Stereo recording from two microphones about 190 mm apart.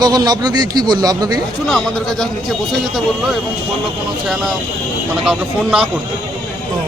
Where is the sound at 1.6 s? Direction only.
Centre (ahead or behind).